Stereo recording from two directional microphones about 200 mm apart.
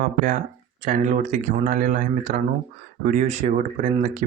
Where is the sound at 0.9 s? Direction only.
40° right (ahead or behind).